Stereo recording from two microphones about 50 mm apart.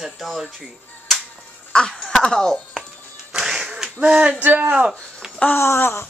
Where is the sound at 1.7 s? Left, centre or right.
Centre.